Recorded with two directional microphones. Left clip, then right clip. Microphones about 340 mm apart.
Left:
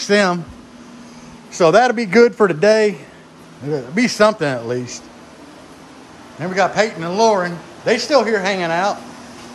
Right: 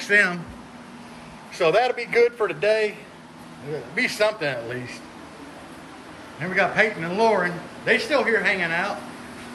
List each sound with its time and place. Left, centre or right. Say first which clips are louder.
0.0 s a man's voice: left 4 dB; centre
1.5 s a man's voice: left 7 dB; left
3.9 s a man's voice: left 7 dB; left
6.4 s a man's voice: left 4 dB; centre